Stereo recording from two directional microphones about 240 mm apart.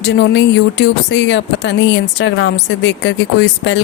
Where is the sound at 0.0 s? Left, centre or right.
Left.